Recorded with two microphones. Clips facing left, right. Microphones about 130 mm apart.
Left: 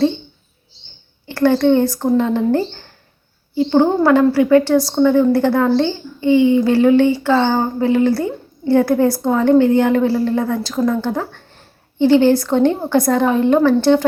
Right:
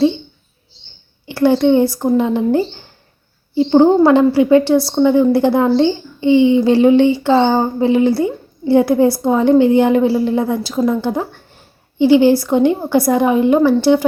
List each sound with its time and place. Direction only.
1.3 s a woman's voice: 10° right (ahead or behind)
3.5 s a woman's voice: 25° right (ahead or behind)